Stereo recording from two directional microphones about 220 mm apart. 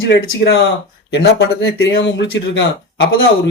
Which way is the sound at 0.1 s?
50° left (ahead or behind).